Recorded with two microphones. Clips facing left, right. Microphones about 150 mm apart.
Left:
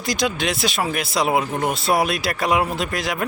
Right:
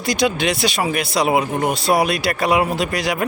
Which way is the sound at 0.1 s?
Centre (ahead or behind).